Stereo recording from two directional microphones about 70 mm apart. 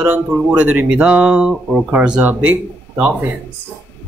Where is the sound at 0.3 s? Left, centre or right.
Centre.